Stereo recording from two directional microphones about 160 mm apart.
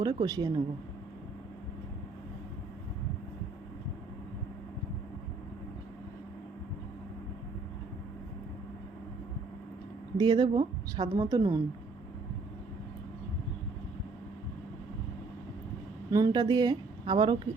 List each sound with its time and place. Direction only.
0.0 s speech: 30° right (ahead or behind)
10.2 s speech: 25° right (ahead or behind)
16.1 s speech: 25° right (ahead or behind)